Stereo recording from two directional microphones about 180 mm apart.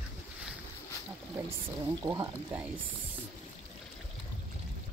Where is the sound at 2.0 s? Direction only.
20° right (ahead or behind).